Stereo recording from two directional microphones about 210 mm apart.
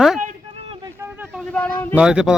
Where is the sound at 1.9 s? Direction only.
5° right (ahead or behind).